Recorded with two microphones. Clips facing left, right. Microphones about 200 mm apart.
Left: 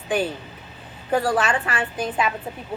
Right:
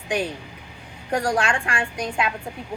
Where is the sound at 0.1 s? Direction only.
5° left (ahead or behind).